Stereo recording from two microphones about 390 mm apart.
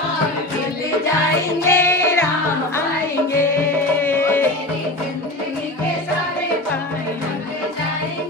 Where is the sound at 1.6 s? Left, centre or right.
Centre.